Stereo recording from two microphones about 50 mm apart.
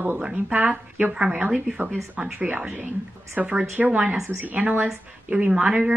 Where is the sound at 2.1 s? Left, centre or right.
Right.